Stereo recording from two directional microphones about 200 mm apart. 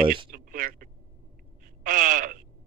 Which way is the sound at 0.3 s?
45° right (ahead or behind).